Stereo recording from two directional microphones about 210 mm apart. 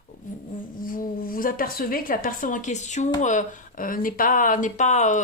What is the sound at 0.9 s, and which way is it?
A woman's voice, 40° left (ahead or behind).